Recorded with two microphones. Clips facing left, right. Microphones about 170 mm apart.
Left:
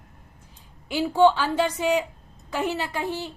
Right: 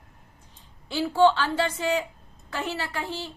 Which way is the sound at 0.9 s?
15° left (ahead or behind).